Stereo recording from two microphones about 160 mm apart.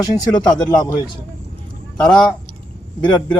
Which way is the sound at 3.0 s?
30° left (ahead or behind).